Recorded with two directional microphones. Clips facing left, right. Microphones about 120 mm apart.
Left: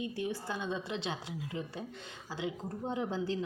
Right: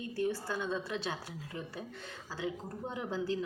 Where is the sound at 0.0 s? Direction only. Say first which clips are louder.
Right 2 dB; 15° left (ahead or behind).